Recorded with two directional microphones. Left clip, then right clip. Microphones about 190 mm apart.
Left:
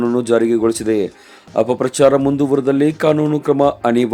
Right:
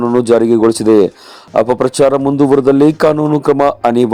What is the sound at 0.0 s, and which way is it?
Speech, 20° right (ahead or behind).